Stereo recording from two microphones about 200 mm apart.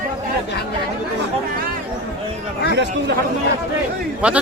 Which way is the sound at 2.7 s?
60° right (ahead or behind).